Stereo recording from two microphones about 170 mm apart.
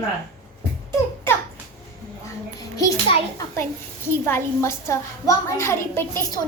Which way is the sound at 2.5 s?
20° left (ahead or behind).